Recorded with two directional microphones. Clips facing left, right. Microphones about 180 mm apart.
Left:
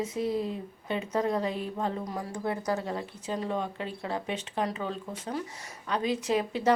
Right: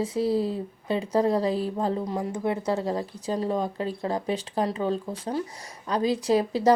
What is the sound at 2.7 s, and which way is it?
Speech, 30° right (ahead or behind).